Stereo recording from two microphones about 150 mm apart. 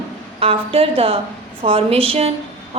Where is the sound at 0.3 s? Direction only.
40° right (ahead or behind).